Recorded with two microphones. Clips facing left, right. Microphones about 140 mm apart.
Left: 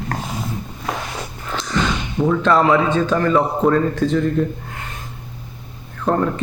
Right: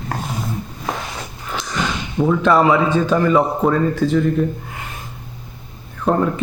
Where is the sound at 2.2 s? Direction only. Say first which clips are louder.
Right 1 dB; 5° right (ahead or behind).